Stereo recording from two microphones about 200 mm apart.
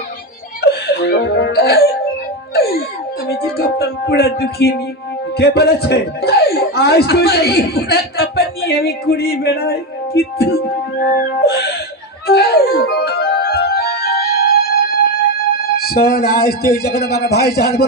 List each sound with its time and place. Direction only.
0.6 s music: 55° left (ahead or behind)
3.2 s music: 50° left (ahead or behind)
5.4 s speech: 55° left (ahead or behind)
12.3 s music: 50° left (ahead or behind)
15.7 s speech: 50° left (ahead or behind)